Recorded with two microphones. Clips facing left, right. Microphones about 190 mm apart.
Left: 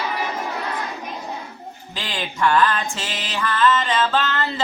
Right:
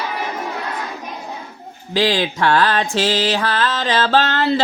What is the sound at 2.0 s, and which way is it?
Mantra, 80° right.